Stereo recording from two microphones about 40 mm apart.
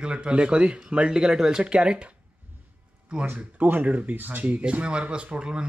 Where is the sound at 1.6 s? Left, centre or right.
Right.